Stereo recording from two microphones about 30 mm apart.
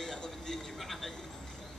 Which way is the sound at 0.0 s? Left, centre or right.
Centre.